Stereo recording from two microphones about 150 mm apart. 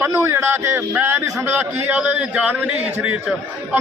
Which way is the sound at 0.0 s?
20° right (ahead or behind).